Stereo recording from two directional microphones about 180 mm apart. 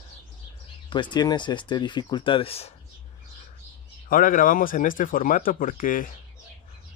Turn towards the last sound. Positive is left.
turn(degrees=50)  # may be behind; listen again after turning